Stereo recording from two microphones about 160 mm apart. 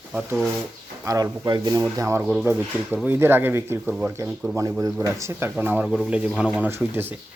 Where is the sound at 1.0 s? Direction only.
20° right (ahead or behind).